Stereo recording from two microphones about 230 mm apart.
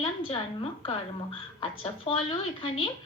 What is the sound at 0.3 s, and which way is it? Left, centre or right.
A woman's voice, left.